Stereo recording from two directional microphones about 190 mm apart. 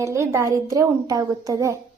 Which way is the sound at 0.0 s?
15° right (ahead or behind).